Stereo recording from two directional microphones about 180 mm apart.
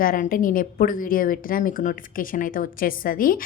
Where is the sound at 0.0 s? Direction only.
50° left (ahead or behind).